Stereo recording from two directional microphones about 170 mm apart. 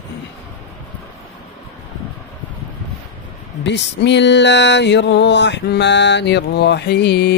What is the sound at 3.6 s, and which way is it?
Music, 90° left.